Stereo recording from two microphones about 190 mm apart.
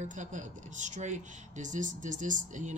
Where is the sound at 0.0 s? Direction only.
40° right (ahead or behind).